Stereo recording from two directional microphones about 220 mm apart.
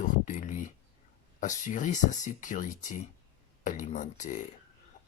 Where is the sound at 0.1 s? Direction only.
35° left (ahead or behind).